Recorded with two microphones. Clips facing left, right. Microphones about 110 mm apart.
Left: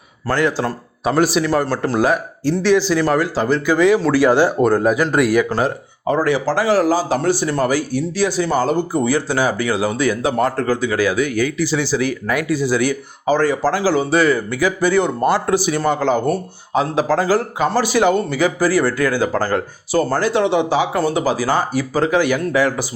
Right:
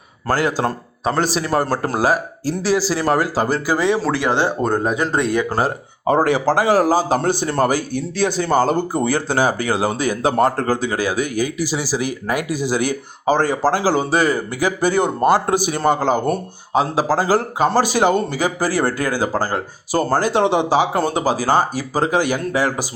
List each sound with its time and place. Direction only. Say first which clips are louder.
1.0 s a man's voice: left 3 dB; 5° left (ahead or behind)
1.3 s speech: left 2 dB; 35° right (ahead or behind)
4.1 s speech: left 5 dB; 20° right (ahead or behind)
5.5 s speech: left 1 dB; 40° right (ahead or behind)
6.4 s speech: right 1 dB; 20° right (ahead or behind)
7.1 s speech: left 1 dB; 50° right (ahead or behind); by 11.5 s 35° right (ahead or behind)
11.7 s speech: left 3 dB; 10° right (ahead or behind)
12.9 s speech: even; 40° right (ahead or behind)